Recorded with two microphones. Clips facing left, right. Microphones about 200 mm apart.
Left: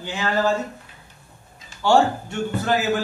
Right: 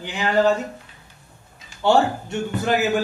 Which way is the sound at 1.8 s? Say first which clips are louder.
Even; 20° right (ahead or behind).